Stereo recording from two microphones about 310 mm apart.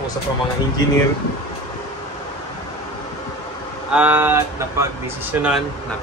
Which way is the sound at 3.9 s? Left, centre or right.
Centre.